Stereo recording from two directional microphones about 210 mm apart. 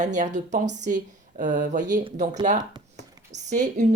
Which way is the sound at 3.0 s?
35° right (ahead or behind).